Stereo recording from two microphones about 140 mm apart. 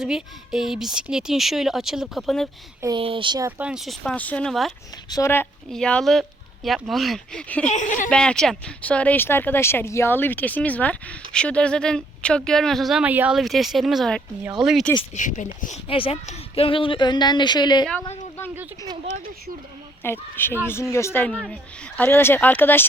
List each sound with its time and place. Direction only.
0.0 s speech: 5° right (ahead or behind)
3.0 s speech: 40° right (ahead or behind)
3.6 s speech: 5° right (ahead or behind)
5.0 s speech: 30° left (ahead or behind)
5.7 s speech: 5° left (ahead or behind)
7.7 s speech: 65° left (ahead or behind)
8.1 s speech: 5° left (ahead or behind)
15.1 s speech: 65° left (ahead or behind)
15.9 s speech: 40° left (ahead or behind)
20.0 s speech: 15° left (ahead or behind)